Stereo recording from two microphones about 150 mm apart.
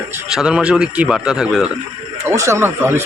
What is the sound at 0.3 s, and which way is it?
A man's voice, 5° right (ahead or behind).